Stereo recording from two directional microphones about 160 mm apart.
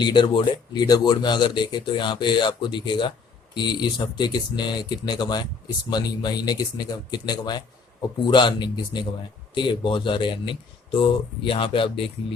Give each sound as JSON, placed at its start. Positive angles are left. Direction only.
{"t": 0.0, "sound": "speech", "side_deg": 30}